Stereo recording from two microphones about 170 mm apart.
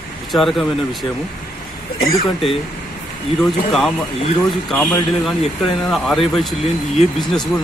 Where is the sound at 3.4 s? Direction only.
Centre (ahead or behind).